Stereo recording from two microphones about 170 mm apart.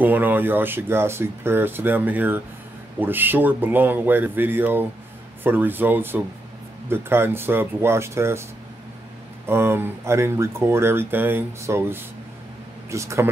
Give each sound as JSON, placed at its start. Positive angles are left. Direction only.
{"t": 0.0, "sound": "speech", "side_deg": -10}
{"t": 9.5, "sound": "speech", "side_deg": -15}